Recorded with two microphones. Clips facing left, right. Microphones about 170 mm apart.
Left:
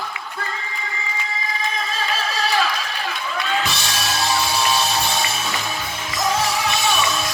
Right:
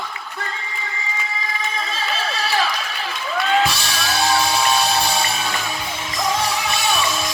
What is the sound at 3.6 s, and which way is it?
Music, centre (ahead or behind).